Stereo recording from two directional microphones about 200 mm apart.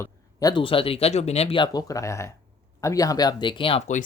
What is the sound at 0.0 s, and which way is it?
Speech, 20° left (ahead or behind).